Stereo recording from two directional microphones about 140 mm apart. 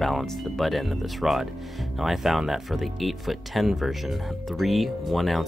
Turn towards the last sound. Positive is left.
turn(degrees=0)  # may be behind; listen again after turning